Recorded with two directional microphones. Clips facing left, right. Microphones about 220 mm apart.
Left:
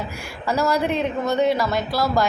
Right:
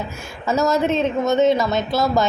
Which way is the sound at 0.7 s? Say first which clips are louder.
Right 3 dB; 20° right (ahead or behind).